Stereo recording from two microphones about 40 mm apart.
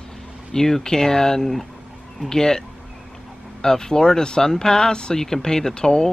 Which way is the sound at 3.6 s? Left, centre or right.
Centre.